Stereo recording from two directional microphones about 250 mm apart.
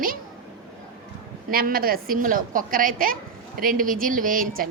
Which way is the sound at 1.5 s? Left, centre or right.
Right.